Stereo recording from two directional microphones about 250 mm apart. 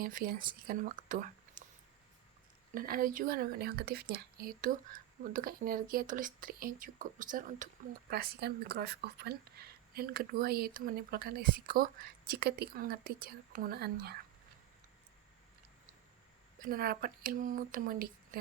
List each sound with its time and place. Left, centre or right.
0.0 s speech: right
2.7 s speech: right
16.6 s speech: right